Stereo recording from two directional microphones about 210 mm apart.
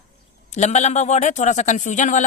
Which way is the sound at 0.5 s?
35° left (ahead or behind).